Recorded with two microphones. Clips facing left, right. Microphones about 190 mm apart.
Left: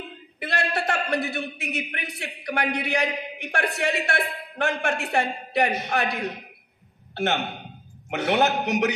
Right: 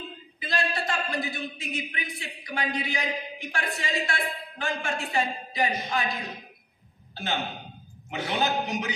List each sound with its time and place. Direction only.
0.4 s a man's voice: 70° left (ahead or behind)